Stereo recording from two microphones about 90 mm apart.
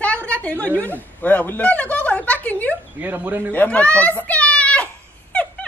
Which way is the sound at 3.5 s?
15° left (ahead or behind).